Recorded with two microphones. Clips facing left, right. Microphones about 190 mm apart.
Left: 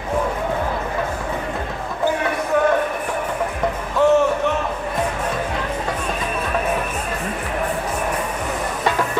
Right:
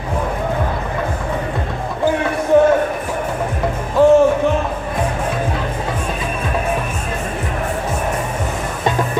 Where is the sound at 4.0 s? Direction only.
35° right (ahead or behind).